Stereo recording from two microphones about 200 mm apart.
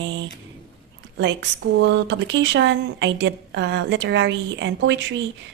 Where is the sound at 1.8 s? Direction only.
60° right (ahead or behind).